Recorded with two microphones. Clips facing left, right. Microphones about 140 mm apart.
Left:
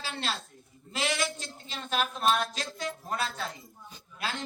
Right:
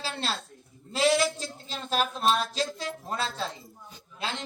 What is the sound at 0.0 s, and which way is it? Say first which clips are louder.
A woman's voice: right 2 dB; 35° right (ahead or behind).